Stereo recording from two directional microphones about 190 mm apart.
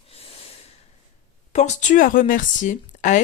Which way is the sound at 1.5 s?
40° left (ahead or behind).